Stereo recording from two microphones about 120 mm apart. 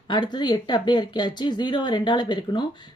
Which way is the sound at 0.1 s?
40° left (ahead or behind).